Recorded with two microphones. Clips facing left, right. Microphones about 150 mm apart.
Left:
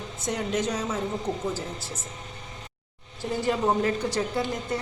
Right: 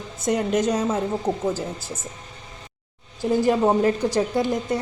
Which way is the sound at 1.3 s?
65° right (ahead or behind).